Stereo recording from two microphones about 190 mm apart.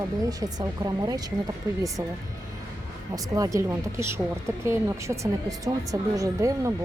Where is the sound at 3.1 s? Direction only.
15° right (ahead or behind).